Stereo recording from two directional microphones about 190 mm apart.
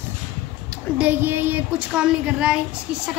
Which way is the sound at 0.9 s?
10° right (ahead or behind).